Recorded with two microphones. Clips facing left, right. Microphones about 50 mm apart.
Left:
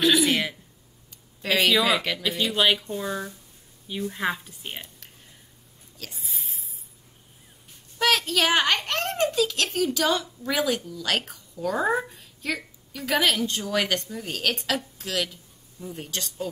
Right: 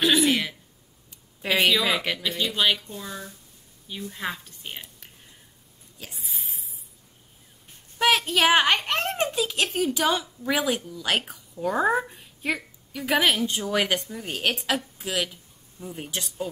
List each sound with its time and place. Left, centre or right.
0.1 s a sound: centre
1.4 s speech: centre
2.0 s a child's voice: centre
2.5 s a woman's voice: centre
3.0 s a woman's voice: left
6.2 s a sound: centre
8.0 s a child's voice: right